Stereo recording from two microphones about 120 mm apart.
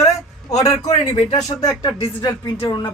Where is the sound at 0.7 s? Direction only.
65° left (ahead or behind).